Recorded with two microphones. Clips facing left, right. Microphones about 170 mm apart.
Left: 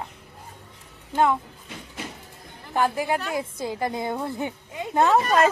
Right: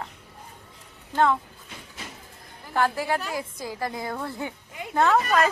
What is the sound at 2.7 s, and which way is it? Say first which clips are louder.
A woman's voice: left 1 dB; 15° left (ahead or behind).